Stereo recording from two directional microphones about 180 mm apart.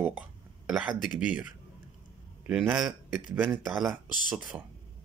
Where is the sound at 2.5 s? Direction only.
5° right (ahead or behind).